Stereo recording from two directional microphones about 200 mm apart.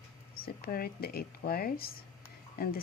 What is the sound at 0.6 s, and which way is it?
Speech, 50° left (ahead or behind).